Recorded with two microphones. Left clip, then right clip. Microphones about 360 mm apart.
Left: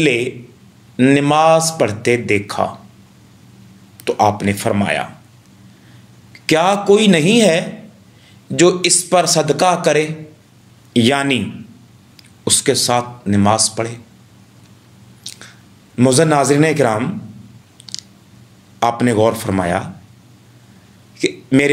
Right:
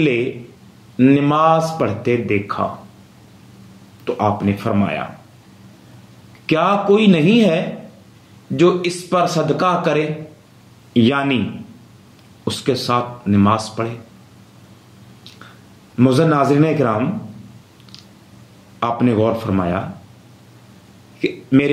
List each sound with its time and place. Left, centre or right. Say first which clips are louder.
0.9 s speech: left 2 dB; left
4.0 s speech: left 4 dB; left
6.4 s speech: left 2 dB; centre
12.4 s speech: left 4 dB; centre
15.3 s squish: left 10 dB; centre
16.0 s speech: left 2 dB; left
17.9 s a sound: left 12 dB; centre
18.8 s speech: left 3 dB; left
21.2 s speech: left 2 dB; left